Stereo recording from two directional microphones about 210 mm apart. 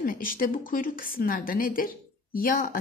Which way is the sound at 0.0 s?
40° left (ahead or behind).